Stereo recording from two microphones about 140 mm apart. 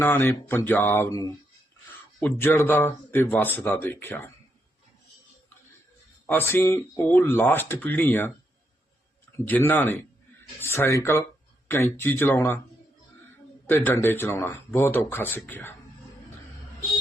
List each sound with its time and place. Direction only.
0.0 s speech: 15° left (ahead or behind)
6.2 s speech: 15° left (ahead or behind)
9.4 s speech: 15° left (ahead or behind)
13.7 s speech: 15° left (ahead or behind)